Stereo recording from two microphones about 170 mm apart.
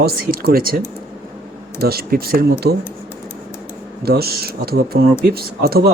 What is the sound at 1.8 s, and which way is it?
Speech, 65° right (ahead or behind).